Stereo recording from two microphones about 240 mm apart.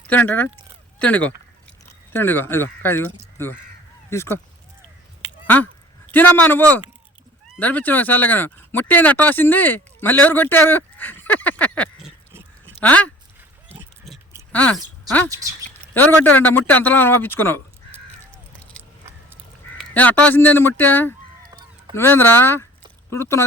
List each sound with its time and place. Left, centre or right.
0.1 s a man's voice: centre
6.1 s a man's voice: centre
13.7 s oink: centre
14.5 s speech: centre
15.3 s speech: centre
16.0 s a man's voice: centre
19.8 s a man's voice: centre